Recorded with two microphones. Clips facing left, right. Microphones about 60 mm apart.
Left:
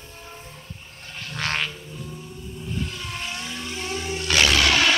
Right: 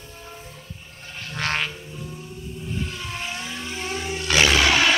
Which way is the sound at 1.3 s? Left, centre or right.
Right.